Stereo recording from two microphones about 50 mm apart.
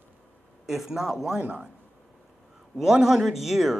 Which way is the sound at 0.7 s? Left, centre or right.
Centre.